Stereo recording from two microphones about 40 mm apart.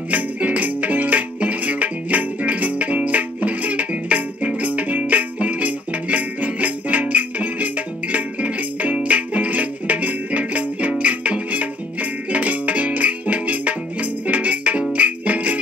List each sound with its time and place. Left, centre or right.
0.1 s music: right